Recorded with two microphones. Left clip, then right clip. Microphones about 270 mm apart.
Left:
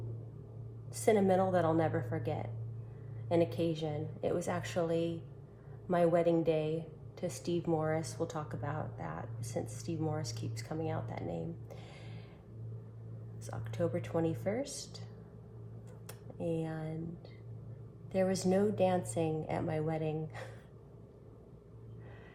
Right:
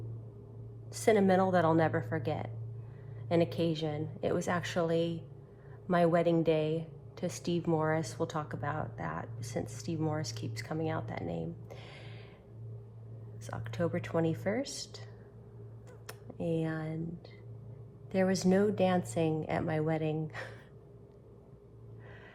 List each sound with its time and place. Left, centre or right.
0.9 s a woman's voice: right
13.5 s a woman's voice: right
16.0 s speech: right
18.1 s a woman's voice: right